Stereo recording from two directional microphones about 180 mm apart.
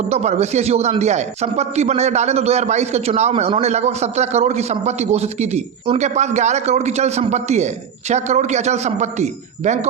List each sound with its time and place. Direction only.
0.1 s a man's voice: 40° right (ahead or behind)